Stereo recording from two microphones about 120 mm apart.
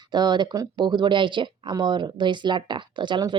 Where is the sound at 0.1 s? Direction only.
35° right (ahead or behind).